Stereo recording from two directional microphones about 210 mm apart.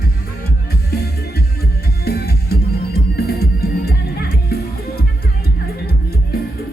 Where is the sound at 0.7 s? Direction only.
50° left (ahead or behind).